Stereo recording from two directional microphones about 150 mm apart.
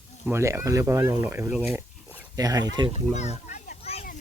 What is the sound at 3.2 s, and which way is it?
Children playing, 50° left (ahead or behind).